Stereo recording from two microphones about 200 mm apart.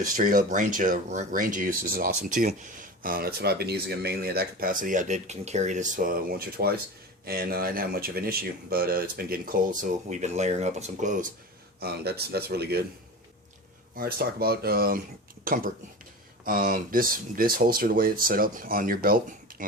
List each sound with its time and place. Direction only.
0.0 s speech: 45° right (ahead or behind)
11.8 s speech: 55° right (ahead or behind)
13.9 s speech: 50° right (ahead or behind)